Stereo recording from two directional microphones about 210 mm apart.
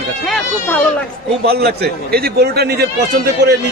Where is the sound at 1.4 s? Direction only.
50° right (ahead or behind).